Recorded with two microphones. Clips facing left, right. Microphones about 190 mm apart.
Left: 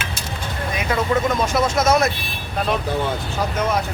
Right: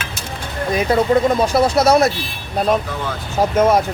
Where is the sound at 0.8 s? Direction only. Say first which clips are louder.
Right 6 dB; 35° right (ahead or behind).